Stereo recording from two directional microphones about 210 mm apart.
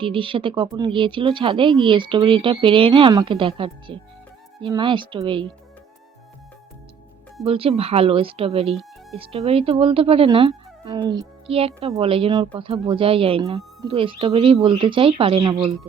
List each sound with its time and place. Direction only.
0.0 s speech: 25° right (ahead or behind)
7.4 s speech: 25° right (ahead or behind)
8.7 s music: centre (ahead or behind)
9.1 s speech: 25° right (ahead or behind)